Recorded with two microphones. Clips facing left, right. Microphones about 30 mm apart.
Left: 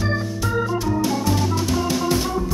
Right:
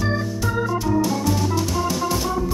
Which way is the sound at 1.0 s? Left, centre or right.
Centre.